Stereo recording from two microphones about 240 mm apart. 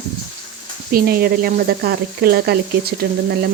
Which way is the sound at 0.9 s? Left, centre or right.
Right.